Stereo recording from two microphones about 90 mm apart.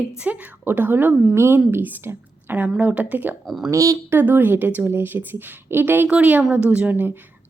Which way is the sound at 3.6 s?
40° right (ahead or behind).